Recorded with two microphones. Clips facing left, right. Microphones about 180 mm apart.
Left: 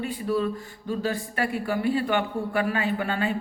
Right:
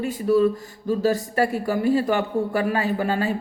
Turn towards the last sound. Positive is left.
turn(degrees=-40)  # may be behind; listen again after turning